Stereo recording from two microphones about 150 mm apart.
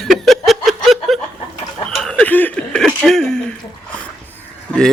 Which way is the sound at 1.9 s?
5° left (ahead or behind).